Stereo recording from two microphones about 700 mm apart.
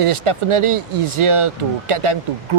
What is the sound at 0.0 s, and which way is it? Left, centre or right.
Speech, right.